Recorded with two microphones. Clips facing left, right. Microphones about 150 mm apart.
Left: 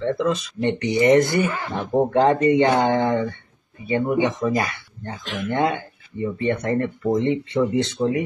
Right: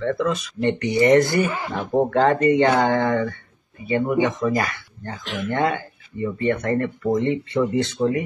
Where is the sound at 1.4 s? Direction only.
15° right (ahead or behind).